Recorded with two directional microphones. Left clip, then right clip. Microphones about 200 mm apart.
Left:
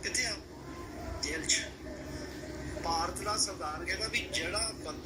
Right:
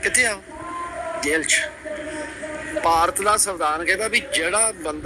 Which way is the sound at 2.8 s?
50° right (ahead or behind).